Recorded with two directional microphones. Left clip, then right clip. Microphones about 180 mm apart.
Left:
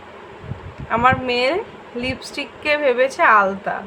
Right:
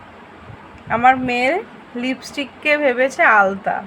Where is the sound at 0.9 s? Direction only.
10° right (ahead or behind).